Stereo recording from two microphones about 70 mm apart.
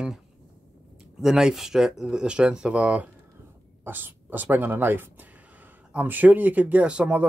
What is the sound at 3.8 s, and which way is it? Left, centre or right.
Speech, right.